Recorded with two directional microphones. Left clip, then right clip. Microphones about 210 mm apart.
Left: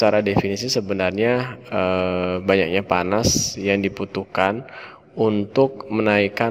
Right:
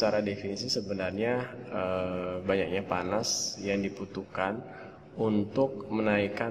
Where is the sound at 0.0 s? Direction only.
40° left (ahead or behind).